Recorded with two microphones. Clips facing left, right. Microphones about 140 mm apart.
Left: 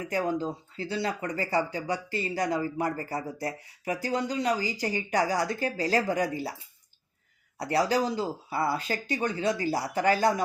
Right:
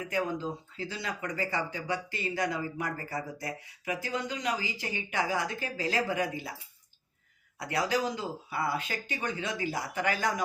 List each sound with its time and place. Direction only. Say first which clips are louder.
0.0 s speech: left 3 dB; 35° left (ahead or behind)
7.6 s speech: left 4 dB; 35° left (ahead or behind)